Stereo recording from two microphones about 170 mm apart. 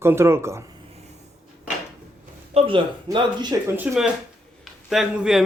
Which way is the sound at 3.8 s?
5° right (ahead or behind).